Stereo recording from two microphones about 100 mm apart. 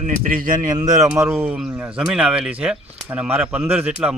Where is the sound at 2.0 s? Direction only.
5° right (ahead or behind).